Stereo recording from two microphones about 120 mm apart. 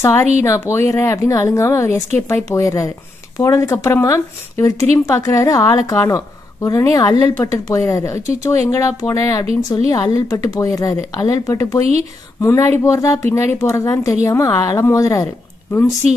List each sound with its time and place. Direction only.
0.0 s speech: 25° left (ahead or behind)